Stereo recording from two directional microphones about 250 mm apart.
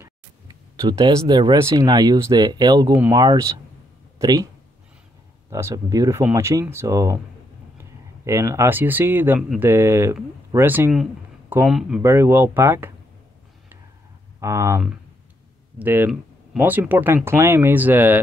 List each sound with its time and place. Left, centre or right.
0.7 s speech: centre
5.5 s speech: centre
8.3 s speech: centre
14.4 s speech: centre